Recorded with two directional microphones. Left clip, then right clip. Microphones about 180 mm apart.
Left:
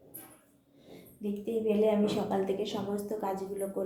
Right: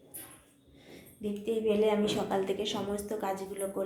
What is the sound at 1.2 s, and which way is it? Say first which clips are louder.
A woman's voice: right 1 dB; centre (ahead or behind).